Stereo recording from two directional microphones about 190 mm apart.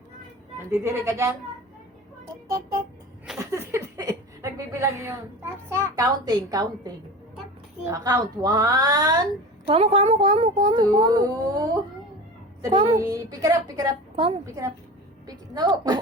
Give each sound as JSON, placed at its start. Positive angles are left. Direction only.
{"t": 0.7, "sound": "a woman's voice", "side_deg": -15}
{"t": 3.3, "sound": "a sound", "side_deg": -15}
{"t": 5.6, "sound": "a woman's voice", "side_deg": -15}
{"t": 9.6, "sound": "speech", "side_deg": -30}
{"t": 12.6, "sound": "a woman's voice", "side_deg": -20}
{"t": 15.3, "sound": "a sound", "side_deg": -20}